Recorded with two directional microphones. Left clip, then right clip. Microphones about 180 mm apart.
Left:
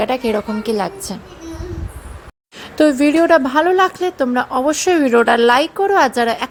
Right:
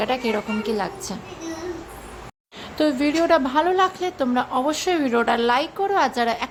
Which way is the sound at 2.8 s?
25° left (ahead or behind).